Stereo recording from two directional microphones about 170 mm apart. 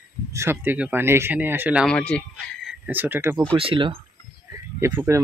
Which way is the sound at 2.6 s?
10° right (ahead or behind).